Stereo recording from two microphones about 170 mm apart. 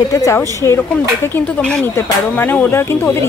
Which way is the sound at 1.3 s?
5° left (ahead or behind).